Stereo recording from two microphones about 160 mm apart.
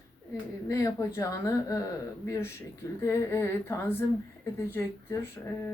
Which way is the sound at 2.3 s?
15° left (ahead or behind).